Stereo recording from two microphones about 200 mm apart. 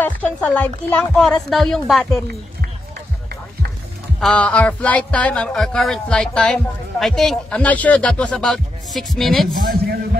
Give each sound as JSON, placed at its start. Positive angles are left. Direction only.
{"t": 0.0, "sound": "a woman's voice", "side_deg": 10}
{"t": 4.2, "sound": "speech", "side_deg": 5}
{"t": 9.6, "sound": "a man's voice", "side_deg": -45}